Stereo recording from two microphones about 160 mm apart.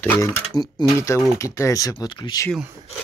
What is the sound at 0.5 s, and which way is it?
Speech, 25° left (ahead or behind).